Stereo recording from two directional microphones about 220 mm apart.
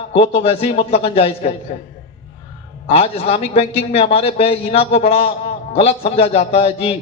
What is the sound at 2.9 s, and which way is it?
A man's voice, 25° left (ahead or behind).